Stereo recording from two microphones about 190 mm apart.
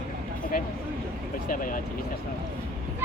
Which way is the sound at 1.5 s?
45° left (ahead or behind).